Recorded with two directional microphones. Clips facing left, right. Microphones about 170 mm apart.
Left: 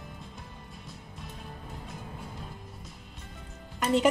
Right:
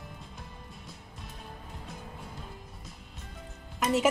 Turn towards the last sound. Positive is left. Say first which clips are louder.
# left 1 dB
turn(degrees=-5)  # may be behind; listen again after turning